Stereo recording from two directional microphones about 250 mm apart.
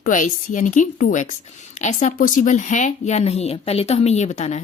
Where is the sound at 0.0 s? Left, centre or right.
Left.